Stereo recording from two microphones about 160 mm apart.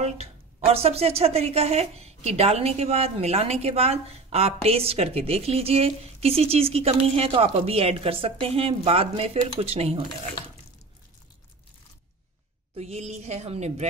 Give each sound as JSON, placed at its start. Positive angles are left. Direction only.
{"t": 0.0, "sound": "a woman's voice", "side_deg": -40}
{"t": 12.7, "sound": "a woman's voice", "side_deg": -40}